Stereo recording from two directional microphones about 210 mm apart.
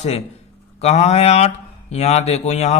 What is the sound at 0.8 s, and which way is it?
Speech, 30° left (ahead or behind).